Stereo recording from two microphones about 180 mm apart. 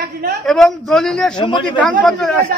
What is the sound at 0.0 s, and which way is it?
Speech, 60° right (ahead or behind).